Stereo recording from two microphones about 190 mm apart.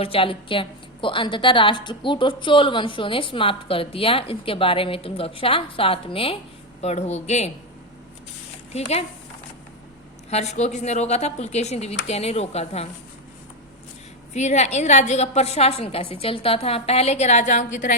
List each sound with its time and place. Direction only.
0.0 s a woman's voice: 30° left (ahead or behind)
8.7 s a woman's voice: 35° left (ahead or behind)
10.2 s a woman's voice: 35° left (ahead or behind)
14.3 s a woman's voice: 35° left (ahead or behind)